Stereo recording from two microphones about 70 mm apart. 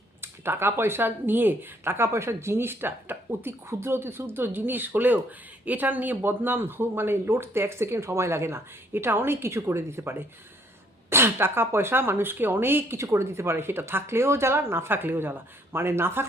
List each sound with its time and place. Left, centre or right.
0.2 s speech: right